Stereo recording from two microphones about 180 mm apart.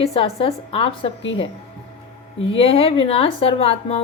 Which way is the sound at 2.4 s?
30° left (ahead or behind).